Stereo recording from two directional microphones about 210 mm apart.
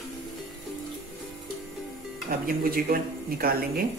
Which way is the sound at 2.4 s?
45° right (ahead or behind).